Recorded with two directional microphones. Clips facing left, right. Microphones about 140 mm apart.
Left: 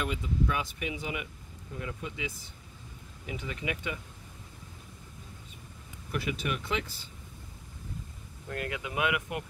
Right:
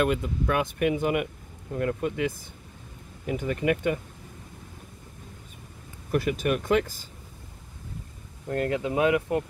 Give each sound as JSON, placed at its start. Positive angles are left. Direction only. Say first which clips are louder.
{"t": 0.0, "sound": "speech", "louder": "right 7 dB", "side_deg": -60}
{"t": 6.1, "sound": "speech", "louder": "right 8 dB", "side_deg": -45}
{"t": 8.5, "sound": "speech", "louder": "right 10 dB", "side_deg": -35}